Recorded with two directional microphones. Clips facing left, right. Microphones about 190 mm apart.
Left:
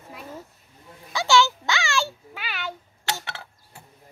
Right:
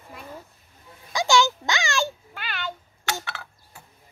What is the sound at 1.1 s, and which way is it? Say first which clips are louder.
A child's voice: even; 15° right (ahead or behind).